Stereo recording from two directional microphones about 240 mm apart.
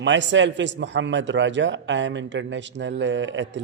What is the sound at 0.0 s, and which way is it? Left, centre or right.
Speech, right.